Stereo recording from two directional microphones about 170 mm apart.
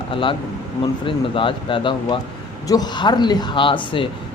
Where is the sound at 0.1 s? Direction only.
30° left (ahead or behind).